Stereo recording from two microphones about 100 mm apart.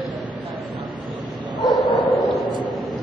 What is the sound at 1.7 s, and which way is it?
Bow-wow, centre (ahead or behind).